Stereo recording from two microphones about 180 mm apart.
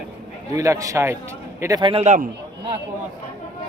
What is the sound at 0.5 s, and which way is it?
A man's voice, 15° right (ahead or behind).